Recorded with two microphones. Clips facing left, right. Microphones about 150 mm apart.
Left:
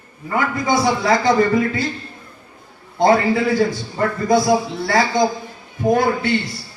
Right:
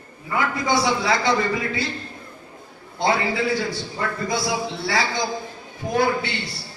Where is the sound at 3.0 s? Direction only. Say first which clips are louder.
Left 7 dB; 45° left (ahead or behind).